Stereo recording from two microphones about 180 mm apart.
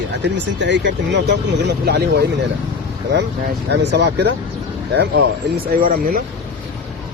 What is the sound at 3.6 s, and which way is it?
Speech, 70° right (ahead or behind).